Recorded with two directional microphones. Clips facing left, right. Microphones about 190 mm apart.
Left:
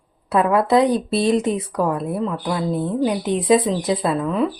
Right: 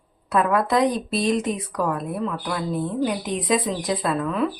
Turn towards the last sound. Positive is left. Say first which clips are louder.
# left 3 dB
turn(degrees=25)  # may be behind; listen again after turning